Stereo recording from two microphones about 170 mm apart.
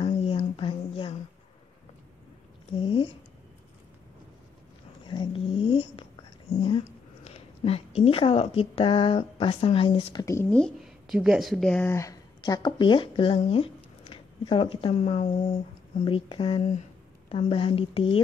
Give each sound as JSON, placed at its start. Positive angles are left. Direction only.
{"t": 0.0, "sound": "a sound", "side_deg": 35}
{"t": 2.8, "sound": "a sound", "side_deg": 30}
{"t": 5.0, "sound": "cat", "side_deg": 25}
{"t": 7.2, "sound": "speech", "side_deg": 35}
{"t": 10.2, "sound": "speech", "side_deg": 15}
{"t": 10.5, "sound": "speech", "side_deg": 0}